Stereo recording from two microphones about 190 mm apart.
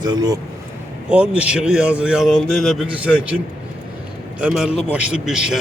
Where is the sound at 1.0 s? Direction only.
5° right (ahead or behind).